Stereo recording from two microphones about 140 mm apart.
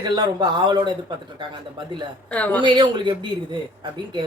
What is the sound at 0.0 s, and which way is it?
Speech, 30° right (ahead or behind).